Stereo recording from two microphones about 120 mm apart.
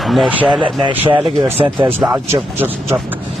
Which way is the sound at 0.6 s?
45° right (ahead or behind).